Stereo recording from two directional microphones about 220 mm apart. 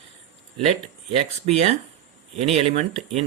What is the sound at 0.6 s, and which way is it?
Speech, 30° right (ahead or behind).